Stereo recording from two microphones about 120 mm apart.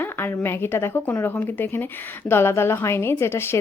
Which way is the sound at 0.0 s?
15° left (ahead or behind).